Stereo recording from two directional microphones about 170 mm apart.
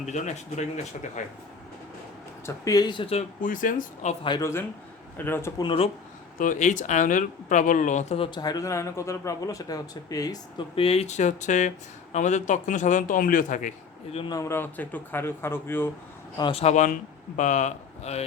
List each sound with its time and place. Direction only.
0.0 s a man's voice: 45° left (ahead or behind)
2.5 s a man's voice: 20° left (ahead or behind)
3.4 s a man's voice: 50° left (ahead or behind)
4.2 s a man's voice: 25° left (ahead or behind)
5.6 s speech: 35° left (ahead or behind)
6.4 s a man's voice: 50° left (ahead or behind)
8.2 s a man's voice: 25° left (ahead or behind)
10.8 s a man's voice: 40° left (ahead or behind)
14.2 s a man's voice: 20° left (ahead or behind)
16.4 s a man's voice: 35° left (ahead or behind)